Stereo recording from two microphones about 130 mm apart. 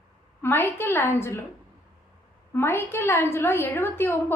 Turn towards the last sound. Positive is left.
turn(degrees=15)  # may be behind; listen again after turning